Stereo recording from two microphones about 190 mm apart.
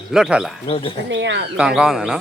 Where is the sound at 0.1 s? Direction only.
5° right (ahead or behind).